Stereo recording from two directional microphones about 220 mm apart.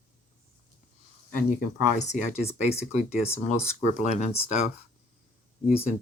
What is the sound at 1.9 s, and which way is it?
Speech, 30° left (ahead or behind).